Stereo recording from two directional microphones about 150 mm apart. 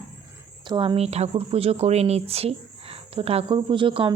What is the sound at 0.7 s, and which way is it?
A woman's voice, 35° right (ahead or behind).